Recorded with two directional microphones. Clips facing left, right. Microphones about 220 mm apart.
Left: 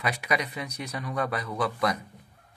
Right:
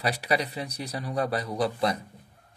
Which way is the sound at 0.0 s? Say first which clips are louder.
Right 2 dB; 35° right (ahead or behind).